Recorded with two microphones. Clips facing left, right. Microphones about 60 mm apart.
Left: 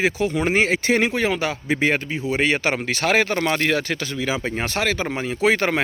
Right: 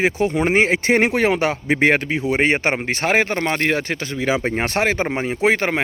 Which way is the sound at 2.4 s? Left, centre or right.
Right.